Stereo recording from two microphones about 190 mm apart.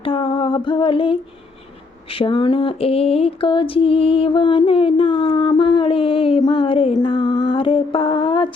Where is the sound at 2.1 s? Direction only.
30° left (ahead or behind).